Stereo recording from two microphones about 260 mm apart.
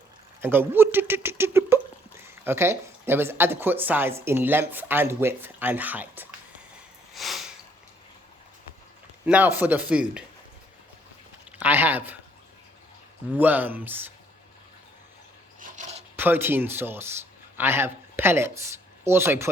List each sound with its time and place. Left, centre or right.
0.4 s speech: centre
7.1 s snort: centre
9.2 s a man's voice: centre
11.6 s speech: centre
13.3 s speech: centre
15.6 s a sound: right
16.1 s speech: centre